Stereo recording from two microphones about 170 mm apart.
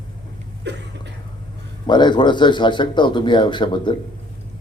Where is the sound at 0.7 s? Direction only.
90° right.